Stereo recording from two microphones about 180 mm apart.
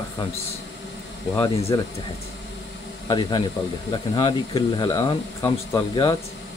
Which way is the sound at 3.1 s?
25° left (ahead or behind).